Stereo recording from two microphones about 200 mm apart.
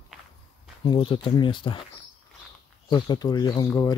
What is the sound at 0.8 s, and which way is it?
Speech, 25° left (ahead or behind).